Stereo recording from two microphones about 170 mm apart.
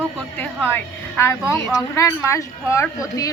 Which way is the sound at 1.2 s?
15° left (ahead or behind).